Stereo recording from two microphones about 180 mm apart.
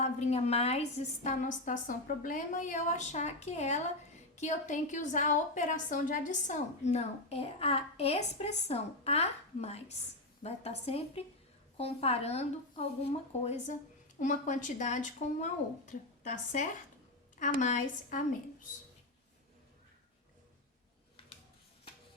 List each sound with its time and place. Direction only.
0.0 s a woman's voice: 35° left (ahead or behind)